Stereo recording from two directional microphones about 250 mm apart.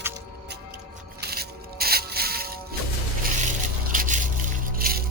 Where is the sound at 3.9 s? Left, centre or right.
Right.